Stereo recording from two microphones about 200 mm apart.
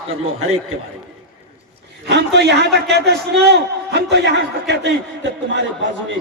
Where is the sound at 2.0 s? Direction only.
60° right (ahead or behind).